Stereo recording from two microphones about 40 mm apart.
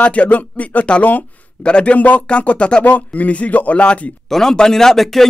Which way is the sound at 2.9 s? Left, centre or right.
Left.